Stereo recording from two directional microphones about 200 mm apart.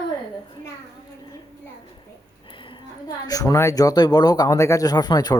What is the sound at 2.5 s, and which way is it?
Speech, 25° left (ahead or behind).